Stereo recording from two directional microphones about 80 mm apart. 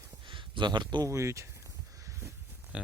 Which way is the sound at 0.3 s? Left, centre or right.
Right.